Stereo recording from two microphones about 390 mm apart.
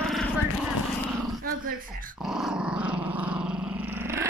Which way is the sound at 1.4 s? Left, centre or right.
Right.